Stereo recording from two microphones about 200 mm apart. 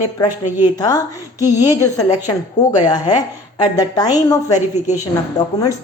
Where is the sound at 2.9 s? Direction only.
20° left (ahead or behind).